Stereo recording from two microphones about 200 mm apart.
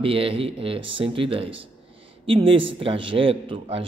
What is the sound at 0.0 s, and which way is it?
A man's voice, 25° right (ahead or behind).